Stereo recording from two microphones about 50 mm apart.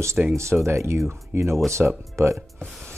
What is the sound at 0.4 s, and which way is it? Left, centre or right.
Speech, right.